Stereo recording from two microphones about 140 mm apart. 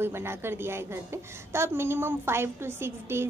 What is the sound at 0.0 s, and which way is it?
A woman's voice, 15° right (ahead or behind).